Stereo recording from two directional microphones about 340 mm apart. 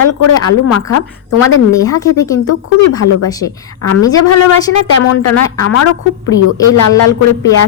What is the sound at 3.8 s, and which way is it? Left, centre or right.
A woman's voice, left.